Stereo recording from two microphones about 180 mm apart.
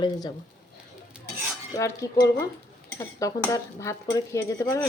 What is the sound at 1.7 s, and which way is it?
Speech, 15° left (ahead or behind).